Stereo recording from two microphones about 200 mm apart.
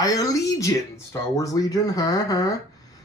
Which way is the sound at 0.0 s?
15° left (ahead or behind).